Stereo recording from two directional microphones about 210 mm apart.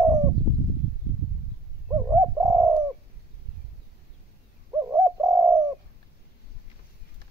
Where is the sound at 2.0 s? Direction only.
15° right (ahead or behind).